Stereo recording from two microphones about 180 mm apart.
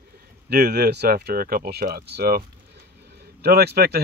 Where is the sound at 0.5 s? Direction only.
60° right (ahead or behind).